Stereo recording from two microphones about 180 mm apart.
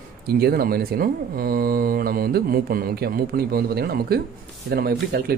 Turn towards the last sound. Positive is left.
turn(degrees=-65)  # may be behind; listen again after turning